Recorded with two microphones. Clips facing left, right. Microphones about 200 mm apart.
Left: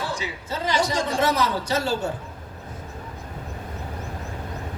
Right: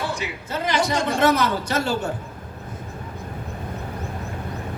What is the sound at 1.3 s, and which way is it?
Speech, 55° right (ahead or behind).